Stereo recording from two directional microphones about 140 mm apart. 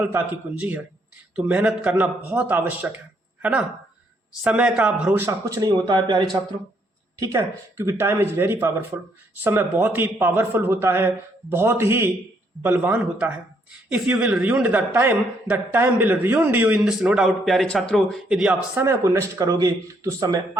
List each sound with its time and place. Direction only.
0.0 s speech: 15° right (ahead or behind)
4.4 s speech: 5° right (ahead or behind)
5.5 s speech: 30° right (ahead or behind)
7.2 s speech: 20° right (ahead or behind)
16.8 s a man's voice: 5° right (ahead or behind)
18.8 s speech: 20° right (ahead or behind)